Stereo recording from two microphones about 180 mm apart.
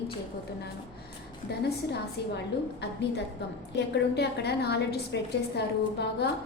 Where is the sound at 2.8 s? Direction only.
70° left (ahead or behind).